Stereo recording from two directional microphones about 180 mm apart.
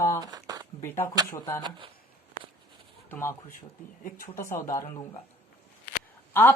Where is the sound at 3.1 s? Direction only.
15° left (ahead or behind).